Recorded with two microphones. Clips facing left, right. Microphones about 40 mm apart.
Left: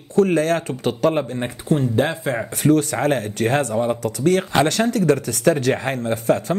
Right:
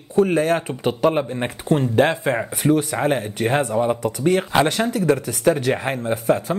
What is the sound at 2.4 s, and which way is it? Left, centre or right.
Speech, centre.